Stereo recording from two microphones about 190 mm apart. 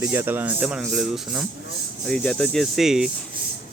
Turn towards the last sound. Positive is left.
turn(degrees=0)  # may be behind; listen again after turning